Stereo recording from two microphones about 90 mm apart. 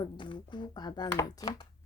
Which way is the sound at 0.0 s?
60° left (ahead or behind).